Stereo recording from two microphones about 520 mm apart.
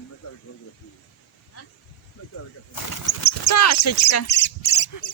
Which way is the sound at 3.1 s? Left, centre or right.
Left.